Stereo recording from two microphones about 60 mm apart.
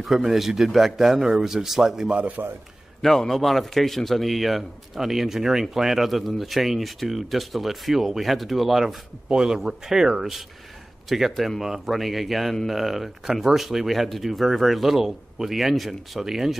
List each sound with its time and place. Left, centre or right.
0.0 s a man's voice: centre
2.1 s speech: right
3.0 s a man's voice: centre